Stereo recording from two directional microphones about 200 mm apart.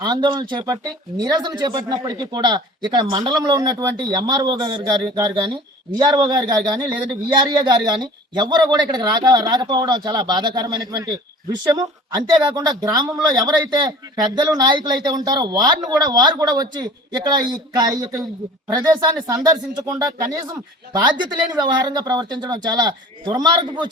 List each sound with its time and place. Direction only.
0.0 s speech: 20° right (ahead or behind)